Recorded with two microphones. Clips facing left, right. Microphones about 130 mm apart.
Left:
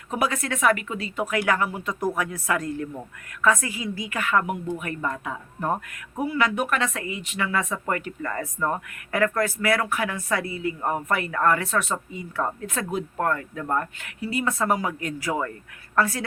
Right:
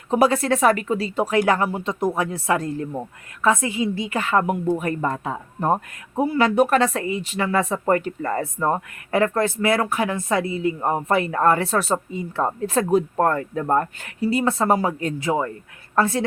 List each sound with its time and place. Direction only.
0.1 s a woman's voice: 30° right (ahead or behind)